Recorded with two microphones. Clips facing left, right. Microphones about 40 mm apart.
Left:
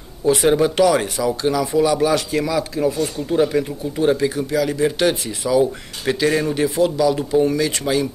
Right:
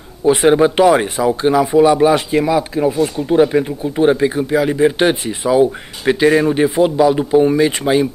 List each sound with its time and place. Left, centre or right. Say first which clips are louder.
0.2 s speech: right 5 dB; right